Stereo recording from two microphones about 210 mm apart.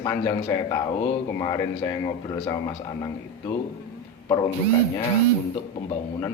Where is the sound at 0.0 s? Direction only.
15° left (ahead or behind).